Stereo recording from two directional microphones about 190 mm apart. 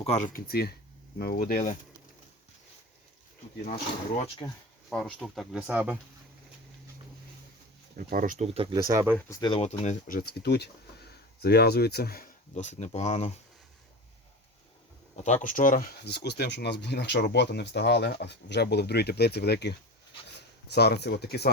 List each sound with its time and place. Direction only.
0.0 s speech: 40° left (ahead or behind)
4.4 s speech: 25° left (ahead or behind)
4.9 s speech: centre (ahead or behind)
7.9 s speech: 45° right (ahead or behind)
8.5 s speech: 25° right (ahead or behind)
9.1 s speech: 15° left (ahead or behind)
9.5 s speech: 35° left (ahead or behind)
15.1 s speech: 40° left (ahead or behind)
16.0 s speech: 60° left (ahead or behind)